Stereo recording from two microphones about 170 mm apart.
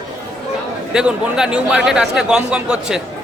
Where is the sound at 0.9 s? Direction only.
5° right (ahead or behind).